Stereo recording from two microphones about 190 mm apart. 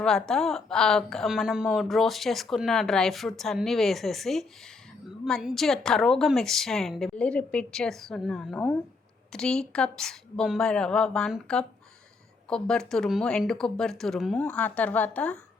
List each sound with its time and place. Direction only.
0.0 s a woman's voice: 5° left (ahead or behind)